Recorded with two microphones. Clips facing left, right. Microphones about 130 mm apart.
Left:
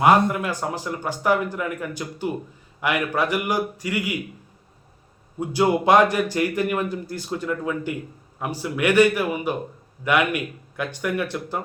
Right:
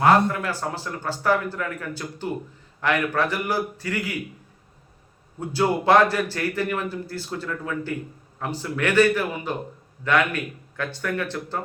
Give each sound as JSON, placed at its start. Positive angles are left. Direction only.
{"t": 0.0, "sound": "a man's voice", "side_deg": 15}
{"t": 5.4, "sound": "a man's voice", "side_deg": 15}